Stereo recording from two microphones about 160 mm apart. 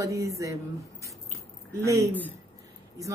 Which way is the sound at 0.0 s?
20° right (ahead or behind).